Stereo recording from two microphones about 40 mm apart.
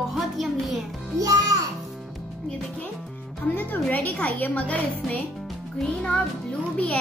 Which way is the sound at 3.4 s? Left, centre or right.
Left.